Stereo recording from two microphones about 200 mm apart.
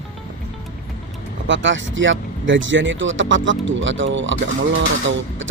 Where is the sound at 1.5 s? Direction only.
70° right (ahead or behind).